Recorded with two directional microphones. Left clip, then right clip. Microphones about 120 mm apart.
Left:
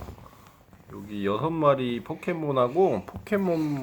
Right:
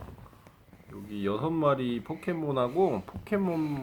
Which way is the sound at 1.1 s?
10° left (ahead or behind).